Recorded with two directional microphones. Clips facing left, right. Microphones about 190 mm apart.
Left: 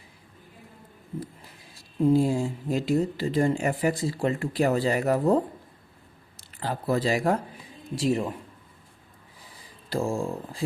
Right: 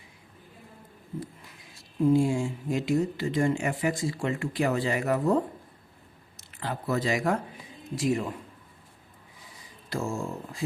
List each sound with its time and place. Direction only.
1.2 s speech: 35° left (ahead or behind)
9.6 s speech: 30° left (ahead or behind)